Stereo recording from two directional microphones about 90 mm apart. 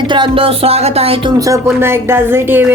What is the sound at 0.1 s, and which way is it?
Speech, 75° right (ahead or behind).